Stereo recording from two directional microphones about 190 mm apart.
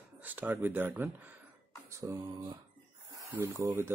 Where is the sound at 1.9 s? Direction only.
15° right (ahead or behind).